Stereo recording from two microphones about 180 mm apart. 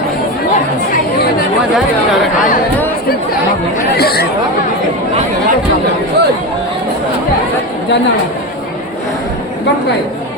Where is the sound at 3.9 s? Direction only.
60° left (ahead or behind).